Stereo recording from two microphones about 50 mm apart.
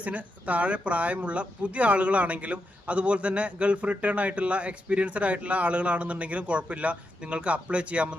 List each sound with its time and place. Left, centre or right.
0.0 s speech: right